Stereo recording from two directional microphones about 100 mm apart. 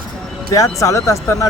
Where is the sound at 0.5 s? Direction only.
35° left (ahead or behind).